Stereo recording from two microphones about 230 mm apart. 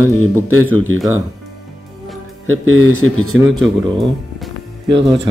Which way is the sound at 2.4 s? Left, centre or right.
Right.